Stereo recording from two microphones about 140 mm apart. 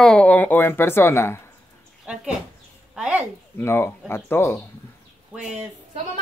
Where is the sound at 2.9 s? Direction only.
5° right (ahead or behind).